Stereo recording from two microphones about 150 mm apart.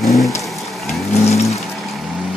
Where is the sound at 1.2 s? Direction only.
45° left (ahead or behind).